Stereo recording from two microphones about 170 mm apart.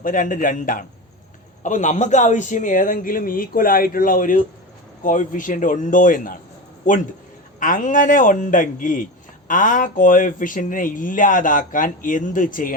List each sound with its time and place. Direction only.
0.0 s speech: 50° left (ahead or behind)
7.6 s speech: 50° left (ahead or behind)